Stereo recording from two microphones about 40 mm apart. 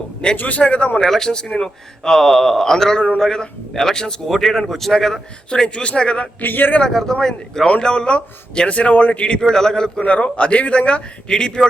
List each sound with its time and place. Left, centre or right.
0.3 s a man's voice: left
1.0 s a man's voice: centre
1.3 s a man's voice: left
5.5 s a man's voice: left
6.4 s speech: left
6.8 s a man's voice: centre; by 9.4 s left
9.4 s a man's voice: centre
10.0 s a man's voice: left